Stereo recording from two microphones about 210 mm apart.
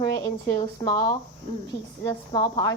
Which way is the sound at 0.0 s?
15° left (ahead or behind).